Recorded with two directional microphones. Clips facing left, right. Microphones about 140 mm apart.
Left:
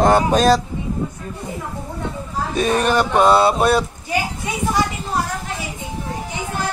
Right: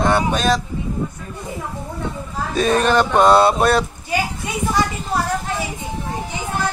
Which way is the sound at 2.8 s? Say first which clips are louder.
Right 1 dB; 10° left (ahead or behind).